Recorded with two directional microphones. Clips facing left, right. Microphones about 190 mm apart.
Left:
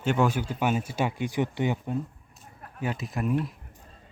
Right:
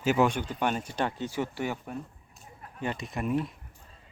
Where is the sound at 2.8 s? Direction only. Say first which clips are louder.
Left 2 dB; 5° left (ahead or behind).